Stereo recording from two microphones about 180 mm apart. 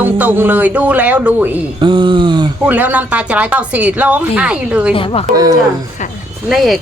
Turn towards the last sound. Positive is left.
turn(degrees=0)  # may be behind; listen again after turning